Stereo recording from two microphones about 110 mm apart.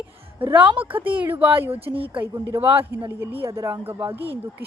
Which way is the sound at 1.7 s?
60° right (ahead or behind).